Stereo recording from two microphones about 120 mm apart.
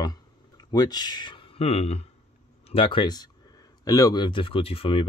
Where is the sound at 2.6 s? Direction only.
45° left (ahead or behind).